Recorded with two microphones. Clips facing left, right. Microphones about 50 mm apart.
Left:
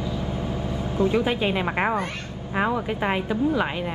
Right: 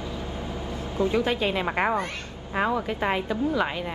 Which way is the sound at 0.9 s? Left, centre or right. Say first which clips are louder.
Left 2 dB; left.